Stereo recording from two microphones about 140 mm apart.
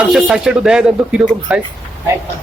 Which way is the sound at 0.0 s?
5° right (ahead or behind).